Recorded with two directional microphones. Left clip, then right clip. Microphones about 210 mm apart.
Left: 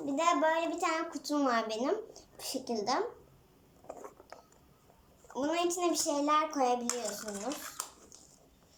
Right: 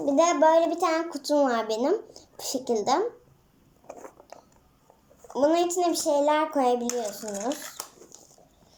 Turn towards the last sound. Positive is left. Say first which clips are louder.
# right 8 dB
turn(degrees=-20)  # may be behind; listen again after turning